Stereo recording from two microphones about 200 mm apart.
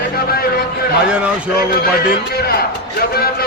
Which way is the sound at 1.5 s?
50° left (ahead or behind).